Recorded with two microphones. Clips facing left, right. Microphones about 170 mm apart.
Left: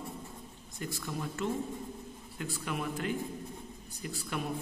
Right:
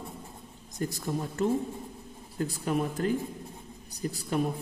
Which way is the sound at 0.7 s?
40° right (ahead or behind).